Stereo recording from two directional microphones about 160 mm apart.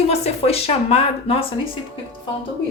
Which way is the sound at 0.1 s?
40° left (ahead or behind).